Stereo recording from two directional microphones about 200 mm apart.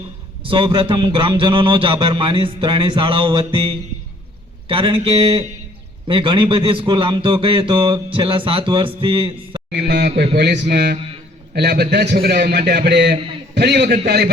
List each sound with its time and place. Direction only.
0.4 s speech: 25° right (ahead or behind)
9.7 s a man's voice: 55° right (ahead or behind)